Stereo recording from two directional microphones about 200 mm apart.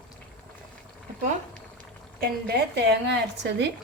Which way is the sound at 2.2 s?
55° right (ahead or behind).